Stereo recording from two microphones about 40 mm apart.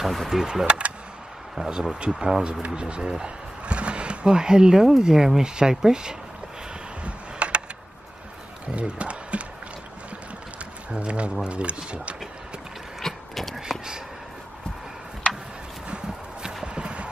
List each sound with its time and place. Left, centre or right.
0.0 s speech: centre
0.3 s speech: centre
0.7 s speech: right
1.6 s speech: centre
2.6 s speech: right
7.1 s a sound: right
8.7 s speech: right
10.9 s speech: right
13.0 s vehicle: centre
13.6 s a sound: centre
16.6 s a sound: right